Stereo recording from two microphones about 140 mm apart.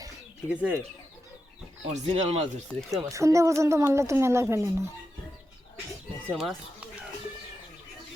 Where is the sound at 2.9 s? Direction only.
20° right (ahead or behind).